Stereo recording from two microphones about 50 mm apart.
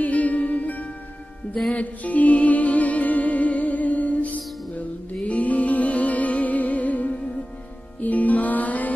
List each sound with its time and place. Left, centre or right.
0.0 s music: left